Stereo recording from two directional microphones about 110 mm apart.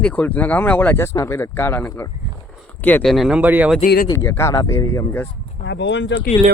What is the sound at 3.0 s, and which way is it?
Speech, centre (ahead or behind).